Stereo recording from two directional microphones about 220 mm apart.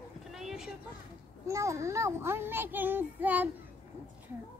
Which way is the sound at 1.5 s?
15° right (ahead or behind).